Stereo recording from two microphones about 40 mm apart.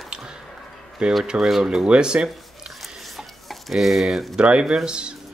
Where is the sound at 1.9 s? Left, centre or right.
Right.